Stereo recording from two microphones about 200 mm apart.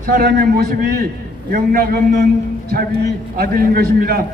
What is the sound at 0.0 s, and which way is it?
A man's voice, 50° right (ahead or behind).